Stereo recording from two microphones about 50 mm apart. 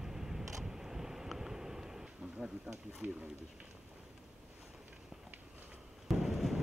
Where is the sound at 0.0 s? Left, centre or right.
Centre.